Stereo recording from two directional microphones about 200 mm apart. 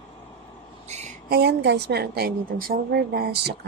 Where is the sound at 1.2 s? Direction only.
55° right (ahead or behind).